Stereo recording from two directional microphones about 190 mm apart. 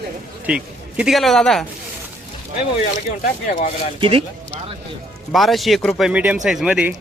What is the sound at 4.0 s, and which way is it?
Speech, 30° right (ahead or behind).